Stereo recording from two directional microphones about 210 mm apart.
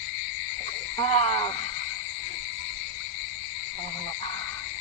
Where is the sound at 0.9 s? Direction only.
25° left (ahead or behind).